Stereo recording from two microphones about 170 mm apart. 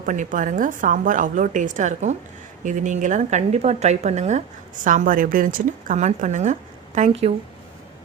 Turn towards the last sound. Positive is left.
turn(degrees=-40)  # may be behind; listen again after turning